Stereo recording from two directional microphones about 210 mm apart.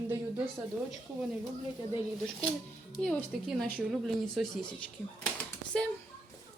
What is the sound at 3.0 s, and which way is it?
Speech, 5° left (ahead or behind).